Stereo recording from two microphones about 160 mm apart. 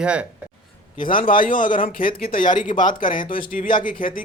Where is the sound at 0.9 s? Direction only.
60° left (ahead or behind).